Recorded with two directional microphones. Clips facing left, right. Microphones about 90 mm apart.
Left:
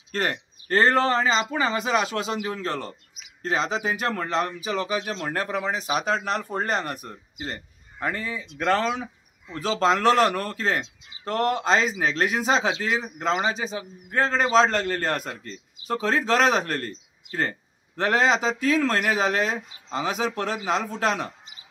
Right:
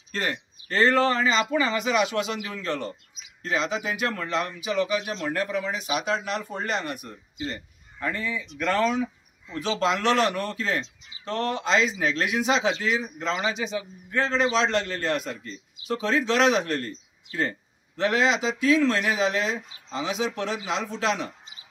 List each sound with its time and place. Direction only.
0.1 s a man's voice: 45° left (ahead or behind)